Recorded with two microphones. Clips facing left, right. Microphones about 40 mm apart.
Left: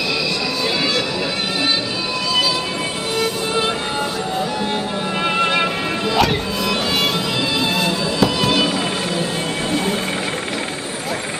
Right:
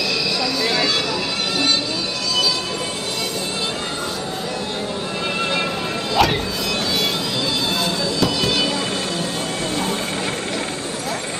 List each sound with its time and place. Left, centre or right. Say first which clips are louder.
5.4 s music: left 4 dB; left
6.2 s music: right 1 dB; centre
7.8 s music: left 2 dB; centre